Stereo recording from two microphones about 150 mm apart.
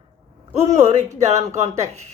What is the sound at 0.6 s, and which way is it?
A woman's voice, 50° right (ahead or behind).